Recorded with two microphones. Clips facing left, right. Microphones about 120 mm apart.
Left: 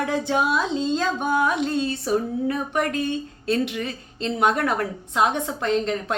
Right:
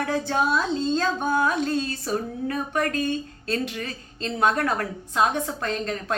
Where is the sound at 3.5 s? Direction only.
20° left (ahead or behind).